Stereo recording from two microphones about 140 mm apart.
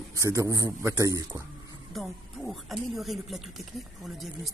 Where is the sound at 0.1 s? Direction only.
20° right (ahead or behind).